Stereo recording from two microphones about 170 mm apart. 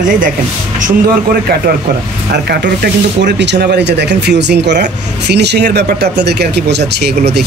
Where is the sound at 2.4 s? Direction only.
80° right.